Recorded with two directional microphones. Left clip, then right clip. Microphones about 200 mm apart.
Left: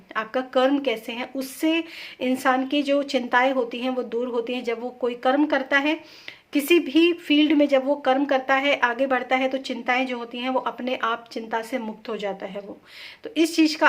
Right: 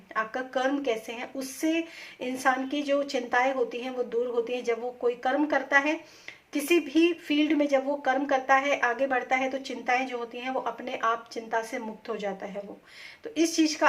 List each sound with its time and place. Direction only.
0.1 s speech: 35° left (ahead or behind)